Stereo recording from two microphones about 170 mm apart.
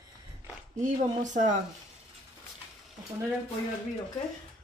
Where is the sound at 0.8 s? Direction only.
45° right (ahead or behind).